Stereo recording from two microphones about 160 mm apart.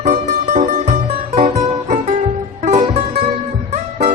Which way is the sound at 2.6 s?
45° right (ahead or behind).